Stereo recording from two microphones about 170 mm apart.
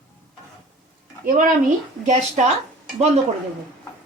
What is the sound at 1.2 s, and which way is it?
A woman's voice, 55° right (ahead or behind).